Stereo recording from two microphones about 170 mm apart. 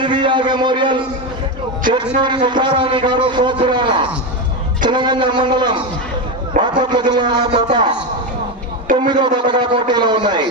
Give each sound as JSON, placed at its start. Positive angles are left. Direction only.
{"t": 0.0, "sound": "a man's voice", "side_deg": -30}
{"t": 2.2, "sound": "a man's voice", "side_deg": -25}
{"t": 9.0, "sound": "a man's voice", "side_deg": -25}